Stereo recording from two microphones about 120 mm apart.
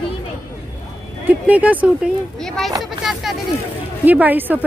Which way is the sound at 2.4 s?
5° left (ahead or behind).